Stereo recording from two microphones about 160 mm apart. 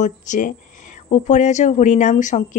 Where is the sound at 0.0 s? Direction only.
50° left (ahead or behind).